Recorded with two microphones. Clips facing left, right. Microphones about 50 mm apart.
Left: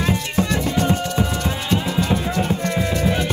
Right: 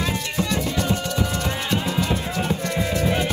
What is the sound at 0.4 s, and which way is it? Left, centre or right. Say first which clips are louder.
Music: left 3 dB; left.